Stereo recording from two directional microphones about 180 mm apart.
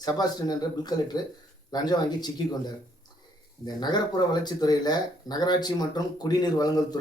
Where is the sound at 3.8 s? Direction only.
25° left (ahead or behind).